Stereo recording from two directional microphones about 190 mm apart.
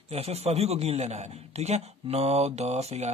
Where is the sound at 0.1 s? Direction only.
35° right (ahead or behind).